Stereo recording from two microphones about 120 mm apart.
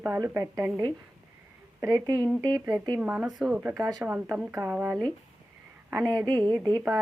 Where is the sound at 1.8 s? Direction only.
25° right (ahead or behind).